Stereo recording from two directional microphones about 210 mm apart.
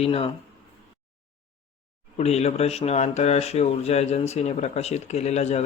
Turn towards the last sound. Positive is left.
turn(degrees=30)  # may be behind; listen again after turning